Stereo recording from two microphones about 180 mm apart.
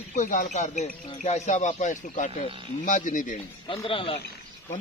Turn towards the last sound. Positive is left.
turn(degrees=30)  # may be behind; listen again after turning